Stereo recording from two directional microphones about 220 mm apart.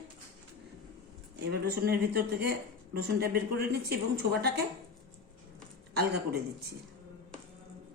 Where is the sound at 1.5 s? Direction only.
45° right (ahead or behind).